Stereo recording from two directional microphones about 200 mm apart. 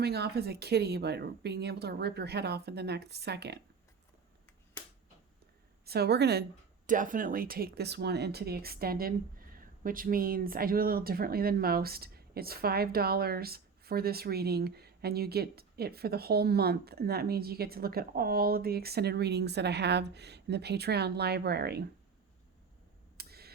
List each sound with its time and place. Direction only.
0.0 s speech: 55° right (ahead or behind)
5.8 s speech: 55° right (ahead or behind)
6.8 s speech: 40° right (ahead or behind)
23.1 s tick: 50° right (ahead or behind)